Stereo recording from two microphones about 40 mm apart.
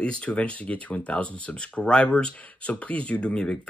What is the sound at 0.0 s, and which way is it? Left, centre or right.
Speech, left.